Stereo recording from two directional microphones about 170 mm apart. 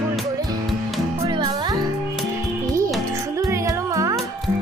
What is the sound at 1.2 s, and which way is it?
Music, 25° right (ahead or behind).